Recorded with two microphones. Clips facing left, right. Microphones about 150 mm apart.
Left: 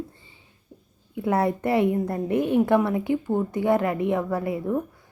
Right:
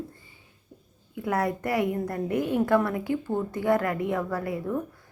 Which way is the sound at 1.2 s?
25° left (ahead or behind).